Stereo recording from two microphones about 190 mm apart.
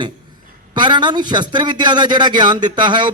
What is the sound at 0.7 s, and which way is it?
A man's voice, 25° right (ahead or behind).